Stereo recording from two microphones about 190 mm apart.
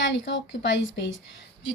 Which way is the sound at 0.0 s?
70° left (ahead or behind).